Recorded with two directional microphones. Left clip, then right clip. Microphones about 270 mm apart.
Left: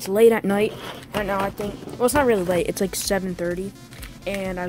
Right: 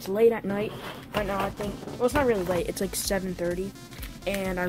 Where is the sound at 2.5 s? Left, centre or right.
Left.